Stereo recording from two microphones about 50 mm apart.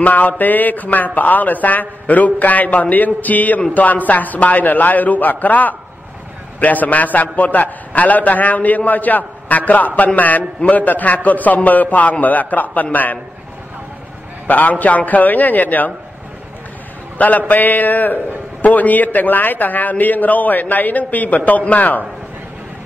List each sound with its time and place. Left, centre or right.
0.0 s a man's voice: left
14.5 s a man's voice: left
17.2 s a man's voice: left